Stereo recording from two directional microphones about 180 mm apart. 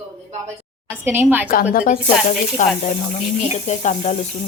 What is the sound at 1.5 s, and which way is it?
Speech, 50° left (ahead or behind).